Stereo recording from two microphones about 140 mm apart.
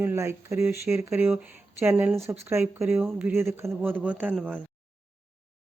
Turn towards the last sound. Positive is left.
turn(degrees=-10)  # may be behind; listen again after turning